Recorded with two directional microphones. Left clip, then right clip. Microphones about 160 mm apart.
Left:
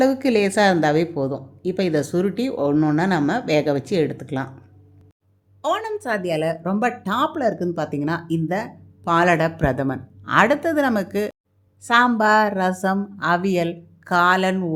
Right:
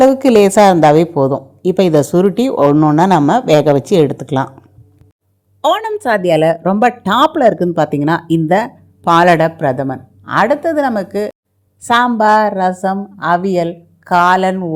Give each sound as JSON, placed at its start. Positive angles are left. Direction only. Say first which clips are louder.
{"t": 0.0, "sound": "a woman's voice", "louder": "right 10 dB", "side_deg": -40}
{"t": 5.6, "sound": "a woman's voice", "louder": "right 9 dB", "side_deg": -40}
{"t": 9.4, "sound": "speech", "louder": "right 7 dB", "side_deg": -10}
{"t": 11.8, "sound": "a woman's voice", "louder": "right 5 dB", "side_deg": -30}
{"t": 12.1, "sound": "speech", "louder": "right 7 dB", "side_deg": -10}